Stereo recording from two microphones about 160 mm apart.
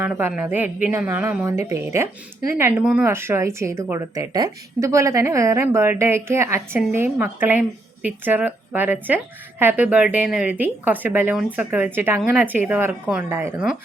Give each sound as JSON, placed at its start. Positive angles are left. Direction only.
{"t": 0.0, "sound": "a woman's voice", "side_deg": -15}